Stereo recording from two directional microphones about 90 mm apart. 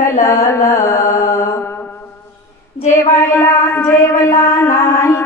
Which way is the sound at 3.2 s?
30° left (ahead or behind).